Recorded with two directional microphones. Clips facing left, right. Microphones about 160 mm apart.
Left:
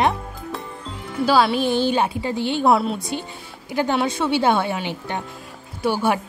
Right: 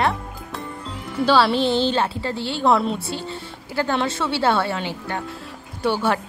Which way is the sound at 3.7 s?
15° left (ahead or behind).